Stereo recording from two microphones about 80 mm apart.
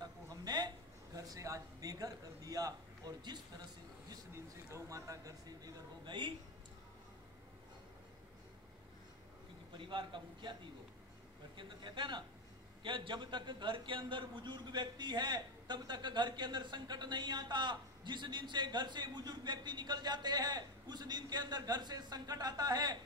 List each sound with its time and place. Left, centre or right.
0.0 s a sound: right
4.3 s speech: right
6.0 s speech: right
9.8 s a man's voice: right
11.5 s speech: right
12.8 s a man's voice: right